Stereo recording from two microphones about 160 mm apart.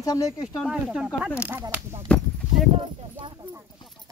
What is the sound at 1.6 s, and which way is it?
Speech, 25° right (ahead or behind).